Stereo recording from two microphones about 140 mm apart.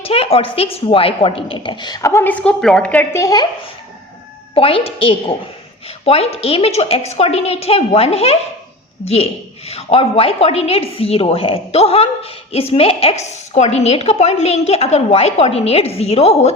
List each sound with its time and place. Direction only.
0.0 s a woman's voice: 45° left (ahead or behind); by 3.4 s 25° left (ahead or behind)
4.5 s a woman's voice: 40° left (ahead or behind)